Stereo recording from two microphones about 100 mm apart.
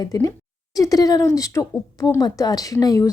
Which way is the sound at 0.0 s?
35° left (ahead or behind).